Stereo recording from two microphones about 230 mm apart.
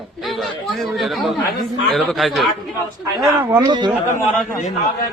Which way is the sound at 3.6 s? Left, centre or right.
Centre.